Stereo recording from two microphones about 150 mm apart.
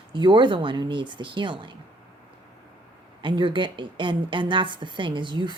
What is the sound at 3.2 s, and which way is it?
Speech, 30° right (ahead or behind).